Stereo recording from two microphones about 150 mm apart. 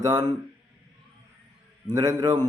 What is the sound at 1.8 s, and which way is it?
Speech, 20° right (ahead or behind).